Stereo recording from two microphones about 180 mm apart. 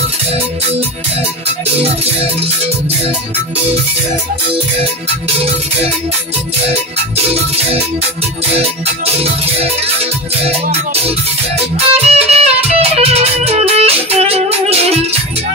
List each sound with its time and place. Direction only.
8.5 s music: 35° right (ahead or behind)